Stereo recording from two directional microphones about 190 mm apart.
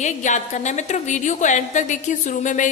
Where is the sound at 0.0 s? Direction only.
40° left (ahead or behind).